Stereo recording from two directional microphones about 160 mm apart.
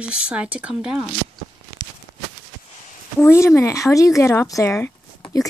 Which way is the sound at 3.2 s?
15° left (ahead or behind).